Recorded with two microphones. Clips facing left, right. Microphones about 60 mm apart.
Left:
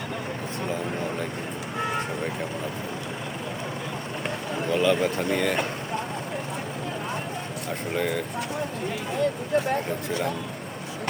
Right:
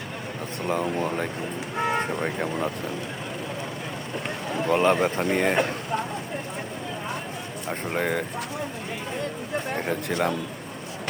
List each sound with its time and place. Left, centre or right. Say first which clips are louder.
0.7 s speech: right 6 dB; right
4.7 s speech: right 2 dB; right
7.7 s speech: right 1 dB; right
9.8 s speech: right 2 dB; right